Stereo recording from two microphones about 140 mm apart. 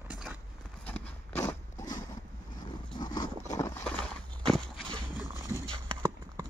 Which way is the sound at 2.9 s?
30° left (ahead or behind).